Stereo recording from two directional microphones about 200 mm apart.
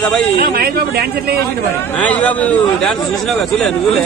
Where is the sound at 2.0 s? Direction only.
5° left (ahead or behind).